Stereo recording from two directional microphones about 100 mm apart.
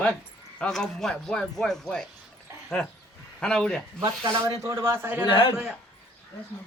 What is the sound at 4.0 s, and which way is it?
Speech, 30° right (ahead or behind).